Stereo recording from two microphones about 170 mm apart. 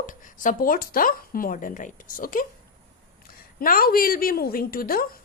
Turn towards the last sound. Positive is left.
turn(degrees=60)  # may be behind; listen again after turning